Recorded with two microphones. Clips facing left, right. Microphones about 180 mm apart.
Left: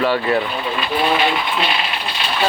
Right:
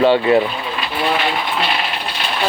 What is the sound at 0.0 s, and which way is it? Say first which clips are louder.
Speech: right 5 dB; 20° right (ahead or behind).